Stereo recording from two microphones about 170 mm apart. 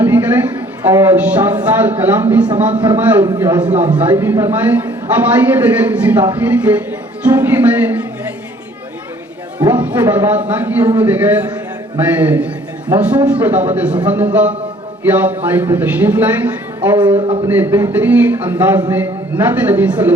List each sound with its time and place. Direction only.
0.0 s a sound: 10° right (ahead or behind)
0.8 s a man's voice: 15° right (ahead or behind)
3.2 s a man's voice: 20° right (ahead or behind)
3.9 s a man's voice: 10° right (ahead or behind)
9.6 s a man's voice: 10° right (ahead or behind)
17.2 s a man's voice: 30° right (ahead or behind)
17.4 s a man's voice: 10° right (ahead or behind)